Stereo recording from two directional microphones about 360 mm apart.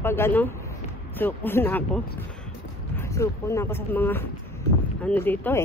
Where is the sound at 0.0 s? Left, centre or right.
Centre.